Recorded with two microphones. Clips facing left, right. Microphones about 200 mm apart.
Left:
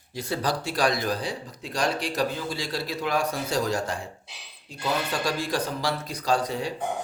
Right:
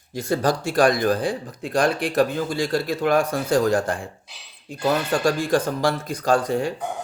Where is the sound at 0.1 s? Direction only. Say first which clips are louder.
Right 6 dB; 45° right (ahead or behind).